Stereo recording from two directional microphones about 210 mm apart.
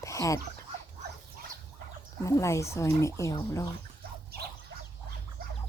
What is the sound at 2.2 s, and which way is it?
Speech, 15° left (ahead or behind).